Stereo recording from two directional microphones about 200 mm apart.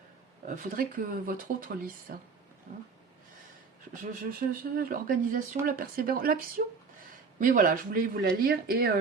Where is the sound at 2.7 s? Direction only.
40° right (ahead or behind).